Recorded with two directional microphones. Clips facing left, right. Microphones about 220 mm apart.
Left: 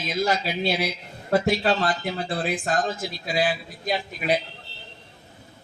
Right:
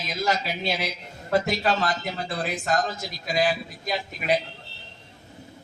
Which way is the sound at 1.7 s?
40° right (ahead or behind).